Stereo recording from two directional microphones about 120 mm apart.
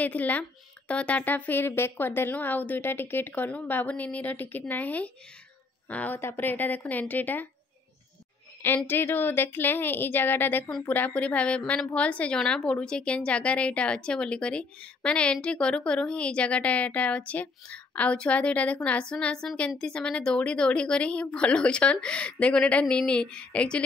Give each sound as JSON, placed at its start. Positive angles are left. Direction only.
{"t": 0.0, "sound": "a woman's voice", "side_deg": 10}
{"t": 8.6, "sound": "a woman's voice", "side_deg": 15}